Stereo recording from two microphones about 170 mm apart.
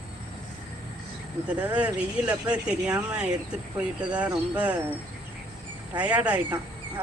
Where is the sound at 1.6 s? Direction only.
10° right (ahead or behind).